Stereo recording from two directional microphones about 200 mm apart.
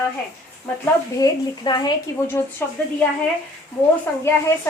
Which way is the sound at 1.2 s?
20° left (ahead or behind).